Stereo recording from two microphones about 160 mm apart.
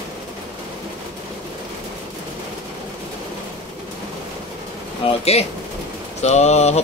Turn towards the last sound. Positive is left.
turn(degrees=45)  # may be behind; listen again after turning